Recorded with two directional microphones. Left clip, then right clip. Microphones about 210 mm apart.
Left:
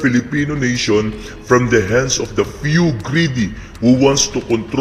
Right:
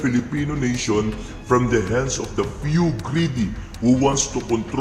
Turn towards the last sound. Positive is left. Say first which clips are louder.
# left 5 dB
turn(degrees=20)  # may be behind; listen again after turning